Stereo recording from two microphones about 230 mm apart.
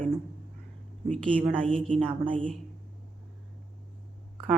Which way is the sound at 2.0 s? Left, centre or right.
Right.